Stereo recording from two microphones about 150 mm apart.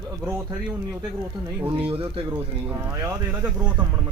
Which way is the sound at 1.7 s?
40° right (ahead or behind).